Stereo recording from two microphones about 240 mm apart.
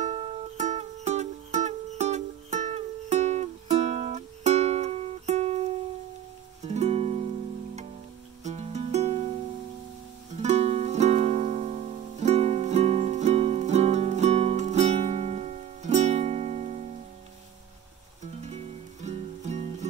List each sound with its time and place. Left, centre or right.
0.0 s music: right
8.5 s music: right
10.4 s music: right
19.0 s music: right